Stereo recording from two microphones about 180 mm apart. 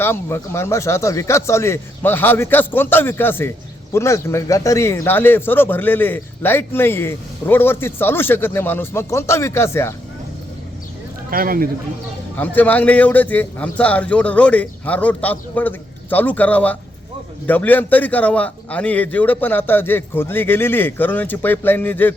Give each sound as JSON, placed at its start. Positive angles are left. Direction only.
{"t": 0.0, "sound": "speech", "side_deg": 15}
{"t": 11.3, "sound": "a man's voice", "side_deg": -50}
{"t": 12.4, "sound": "speech", "side_deg": 10}